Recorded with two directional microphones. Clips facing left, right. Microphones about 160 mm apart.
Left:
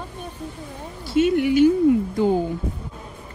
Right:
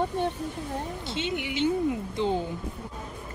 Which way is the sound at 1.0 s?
20° right (ahead or behind).